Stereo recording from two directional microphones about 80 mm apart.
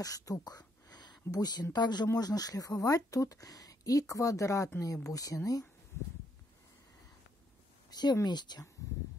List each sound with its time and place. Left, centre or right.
0.0 s speech: left
7.9 s speech: left